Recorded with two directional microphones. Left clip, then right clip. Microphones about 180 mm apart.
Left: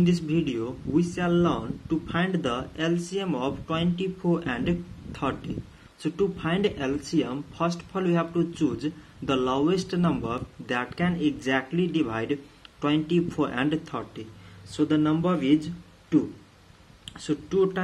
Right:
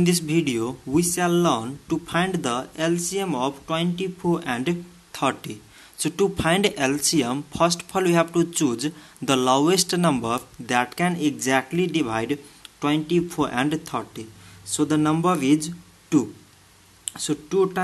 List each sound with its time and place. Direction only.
0.0 s speech: 35° right (ahead or behind)